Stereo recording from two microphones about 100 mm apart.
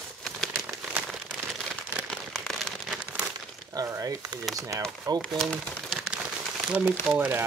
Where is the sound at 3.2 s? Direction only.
20° right (ahead or behind).